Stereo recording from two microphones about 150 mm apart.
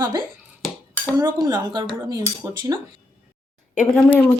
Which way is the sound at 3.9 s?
15° left (ahead or behind).